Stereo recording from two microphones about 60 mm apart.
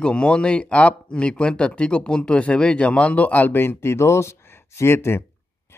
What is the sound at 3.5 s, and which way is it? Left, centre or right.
Speech, left.